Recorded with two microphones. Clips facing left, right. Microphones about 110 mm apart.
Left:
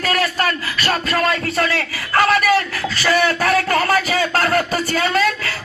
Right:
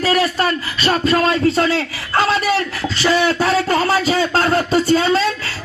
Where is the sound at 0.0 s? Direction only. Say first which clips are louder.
Right 3 dB; 20° right (ahead or behind).